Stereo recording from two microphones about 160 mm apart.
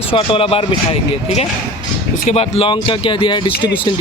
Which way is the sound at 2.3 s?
40° left (ahead or behind).